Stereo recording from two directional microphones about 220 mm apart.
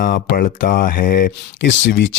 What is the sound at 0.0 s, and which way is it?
Speech, 40° left (ahead or behind).